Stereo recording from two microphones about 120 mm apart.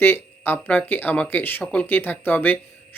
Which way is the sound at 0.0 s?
15° left (ahead or behind).